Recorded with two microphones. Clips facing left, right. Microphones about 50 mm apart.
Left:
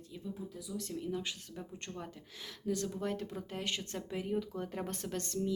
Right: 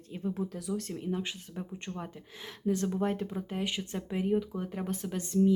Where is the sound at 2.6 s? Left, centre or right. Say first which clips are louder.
Right 6 dB; right.